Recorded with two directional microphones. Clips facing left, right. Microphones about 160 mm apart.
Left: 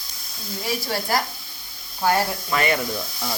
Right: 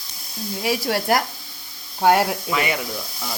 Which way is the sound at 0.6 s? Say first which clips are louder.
Right 4 dB; 75° right (ahead or behind).